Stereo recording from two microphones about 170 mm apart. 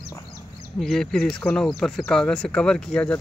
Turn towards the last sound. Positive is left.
turn(degrees=5)  # may be behind; listen again after turning